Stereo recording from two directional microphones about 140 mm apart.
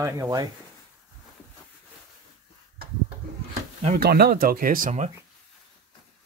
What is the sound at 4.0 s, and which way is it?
Speech, 90° right.